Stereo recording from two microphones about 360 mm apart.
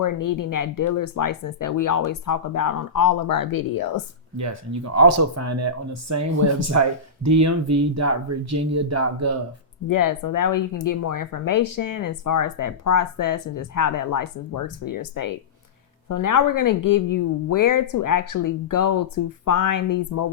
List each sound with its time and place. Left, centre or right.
0.0 s speech: left
4.4 s speech: right
9.9 s speech: left